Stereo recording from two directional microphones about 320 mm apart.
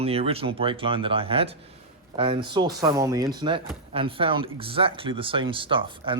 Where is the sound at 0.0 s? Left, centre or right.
Centre.